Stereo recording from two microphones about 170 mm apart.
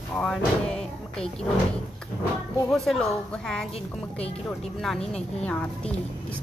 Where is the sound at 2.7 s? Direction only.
Centre (ahead or behind).